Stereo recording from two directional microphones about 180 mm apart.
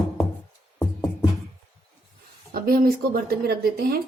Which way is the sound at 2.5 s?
55° right (ahead or behind).